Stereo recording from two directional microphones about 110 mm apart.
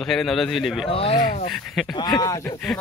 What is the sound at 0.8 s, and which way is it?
Speech, 60° left (ahead or behind).